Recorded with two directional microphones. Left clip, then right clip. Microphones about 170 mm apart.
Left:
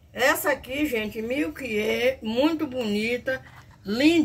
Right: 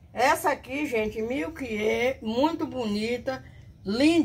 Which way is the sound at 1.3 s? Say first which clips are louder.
Left 3 dB; 25° right (ahead or behind).